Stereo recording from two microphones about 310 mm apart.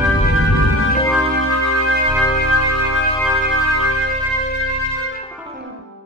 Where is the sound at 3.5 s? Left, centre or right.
Right.